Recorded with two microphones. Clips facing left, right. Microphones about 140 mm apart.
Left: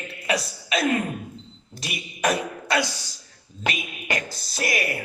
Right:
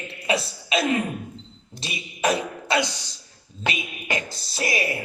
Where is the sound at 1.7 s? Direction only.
25° right (ahead or behind).